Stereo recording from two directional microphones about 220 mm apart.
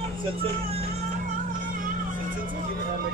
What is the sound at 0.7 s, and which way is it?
Music, 30° right (ahead or behind).